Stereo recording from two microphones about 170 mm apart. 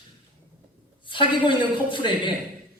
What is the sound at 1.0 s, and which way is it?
A man's voice, 30° left (ahead or behind).